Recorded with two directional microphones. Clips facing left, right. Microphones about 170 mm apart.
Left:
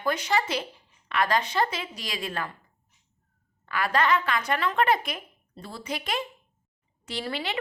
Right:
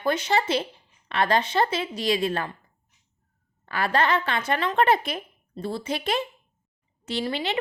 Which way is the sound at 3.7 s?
30° right (ahead or behind).